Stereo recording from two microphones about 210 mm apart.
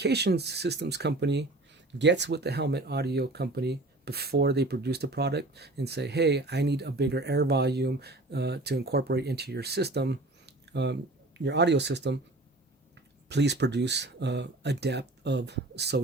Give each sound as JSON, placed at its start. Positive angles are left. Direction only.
{"t": 0.0, "sound": "speech", "side_deg": -50}
{"t": 13.2, "sound": "speech", "side_deg": -55}